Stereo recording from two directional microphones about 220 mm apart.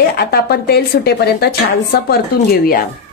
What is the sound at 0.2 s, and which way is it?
Speech, 45° left (ahead or behind).